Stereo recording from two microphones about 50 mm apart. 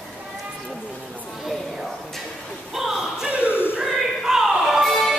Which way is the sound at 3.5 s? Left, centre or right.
Left.